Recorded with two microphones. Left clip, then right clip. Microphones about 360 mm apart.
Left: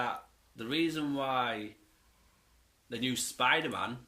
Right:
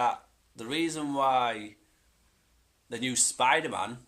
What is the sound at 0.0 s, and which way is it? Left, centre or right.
Speech, centre.